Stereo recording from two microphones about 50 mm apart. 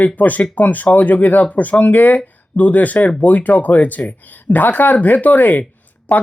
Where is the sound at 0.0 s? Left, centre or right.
Left.